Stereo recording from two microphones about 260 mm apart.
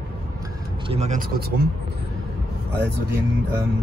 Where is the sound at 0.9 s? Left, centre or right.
Right.